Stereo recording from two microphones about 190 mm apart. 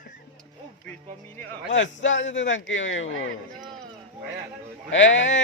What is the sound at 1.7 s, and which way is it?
A man's voice, 80° left.